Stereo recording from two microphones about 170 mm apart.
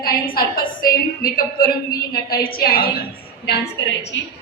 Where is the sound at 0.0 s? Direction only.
60° left (ahead or behind).